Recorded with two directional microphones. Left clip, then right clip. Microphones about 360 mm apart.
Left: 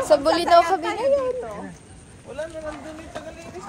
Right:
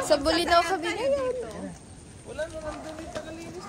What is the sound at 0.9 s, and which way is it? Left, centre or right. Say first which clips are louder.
Speech: left 6 dB; centre.